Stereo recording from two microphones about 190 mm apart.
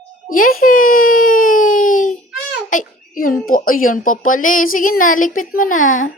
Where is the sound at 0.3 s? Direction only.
45° left (ahead or behind).